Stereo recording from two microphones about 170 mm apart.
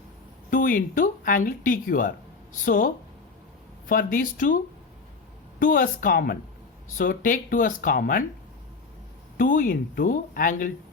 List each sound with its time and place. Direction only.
0.5 s speech: 55° left (ahead or behind)
9.4 s speech: 55° left (ahead or behind)